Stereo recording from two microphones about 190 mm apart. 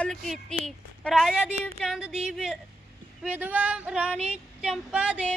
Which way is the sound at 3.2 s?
10° right (ahead or behind).